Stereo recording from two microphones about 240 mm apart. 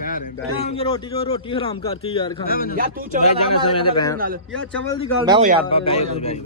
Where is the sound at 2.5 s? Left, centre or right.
Left.